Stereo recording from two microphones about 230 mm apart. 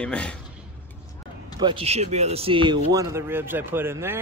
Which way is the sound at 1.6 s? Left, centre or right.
Right.